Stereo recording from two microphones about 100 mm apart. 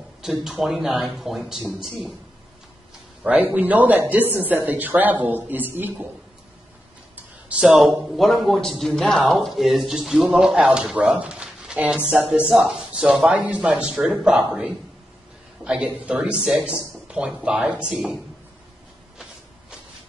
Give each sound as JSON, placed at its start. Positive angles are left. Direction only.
{"t": 0.2, "sound": "a man's voice", "side_deg": -5}
{"t": 3.3, "sound": "a man's voice", "side_deg": -15}
{"t": 7.4, "sound": "a man's voice", "side_deg": -10}